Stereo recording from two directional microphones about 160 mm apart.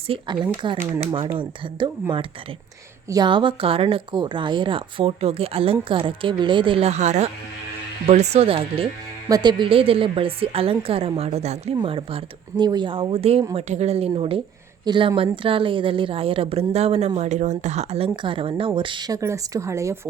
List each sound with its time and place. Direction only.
0.1 s speech: 35° right (ahead or behind)
3.1 s speech: 25° right (ahead or behind)